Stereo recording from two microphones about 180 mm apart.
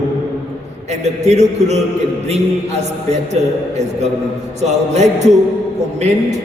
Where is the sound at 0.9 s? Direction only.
40° right (ahead or behind).